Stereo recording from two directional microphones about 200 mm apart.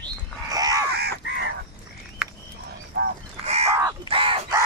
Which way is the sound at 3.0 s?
50° right (ahead or behind).